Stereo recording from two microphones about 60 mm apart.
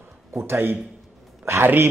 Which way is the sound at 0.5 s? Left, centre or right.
Right.